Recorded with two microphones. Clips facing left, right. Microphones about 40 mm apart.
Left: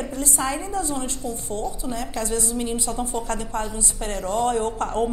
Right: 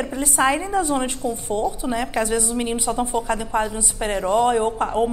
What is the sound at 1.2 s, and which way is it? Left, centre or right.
Speech, centre.